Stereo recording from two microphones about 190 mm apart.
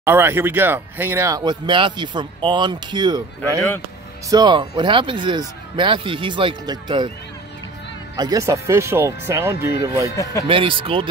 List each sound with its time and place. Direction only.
0.0 s speech: 10° right (ahead or behind)
8.2 s speech: 20° right (ahead or behind)
10.4 s speech: 30° right (ahead or behind)